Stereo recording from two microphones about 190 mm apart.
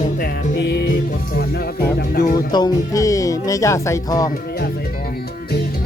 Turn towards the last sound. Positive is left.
turn(degrees=20)  # may be behind; listen again after turning